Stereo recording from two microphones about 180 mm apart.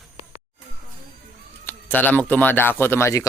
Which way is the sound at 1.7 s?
10° left (ahead or behind).